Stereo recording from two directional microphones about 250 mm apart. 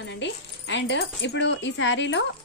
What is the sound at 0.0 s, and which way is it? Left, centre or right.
A woman's voice, left.